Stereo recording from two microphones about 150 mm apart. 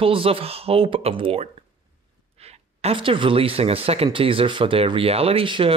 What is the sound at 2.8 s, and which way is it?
Speech, 40° right (ahead or behind).